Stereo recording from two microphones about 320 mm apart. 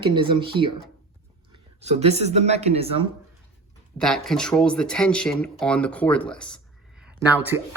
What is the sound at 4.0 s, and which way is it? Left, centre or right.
Speech, centre.